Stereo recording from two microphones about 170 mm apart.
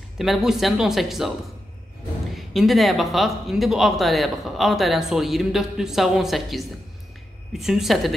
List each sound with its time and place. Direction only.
0.2 s speech: centre (ahead or behind)
2.3 s speech: centre (ahead or behind)